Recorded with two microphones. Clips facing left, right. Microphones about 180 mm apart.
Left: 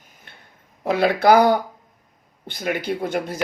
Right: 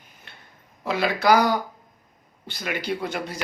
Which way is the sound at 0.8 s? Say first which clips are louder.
Left 4 dB; 55° left (ahead or behind).